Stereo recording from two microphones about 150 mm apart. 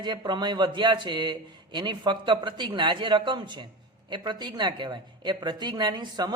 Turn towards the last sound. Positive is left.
turn(degrees=-30)  # may be behind; listen again after turning